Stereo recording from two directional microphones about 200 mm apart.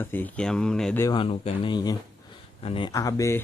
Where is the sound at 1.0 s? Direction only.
25° left (ahead or behind).